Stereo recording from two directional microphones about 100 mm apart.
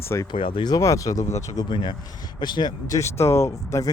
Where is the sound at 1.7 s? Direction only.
50° left (ahead or behind).